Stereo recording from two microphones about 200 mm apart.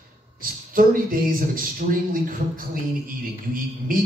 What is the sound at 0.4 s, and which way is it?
Speech, 45° right (ahead or behind).